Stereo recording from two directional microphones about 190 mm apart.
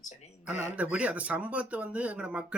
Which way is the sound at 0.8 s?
5° right (ahead or behind).